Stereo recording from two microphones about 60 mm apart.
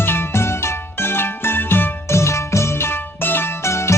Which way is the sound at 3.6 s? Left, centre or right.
Left.